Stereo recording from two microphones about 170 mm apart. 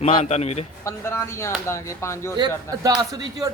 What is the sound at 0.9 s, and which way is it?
Speech, 15° left (ahead or behind).